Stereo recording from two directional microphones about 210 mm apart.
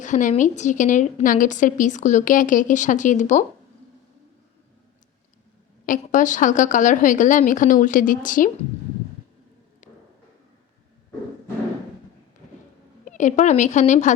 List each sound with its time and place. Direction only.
0.0 s a woman's voice: 35° left (ahead or behind)
5.8 s a woman's voice: 40° left (ahead or behind)
9.8 s a sound: 35° left (ahead or behind)
13.1 s a woman's voice: 35° left (ahead or behind)